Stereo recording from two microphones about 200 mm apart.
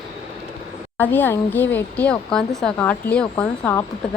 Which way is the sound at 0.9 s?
10° left (ahead or behind).